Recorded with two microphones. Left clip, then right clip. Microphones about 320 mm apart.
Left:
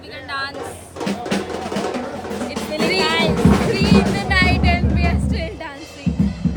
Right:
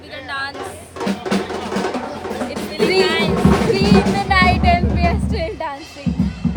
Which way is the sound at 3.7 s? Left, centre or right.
Centre.